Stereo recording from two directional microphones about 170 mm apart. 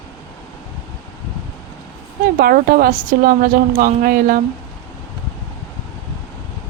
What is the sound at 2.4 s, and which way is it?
A woman's voice, 60° right (ahead or behind).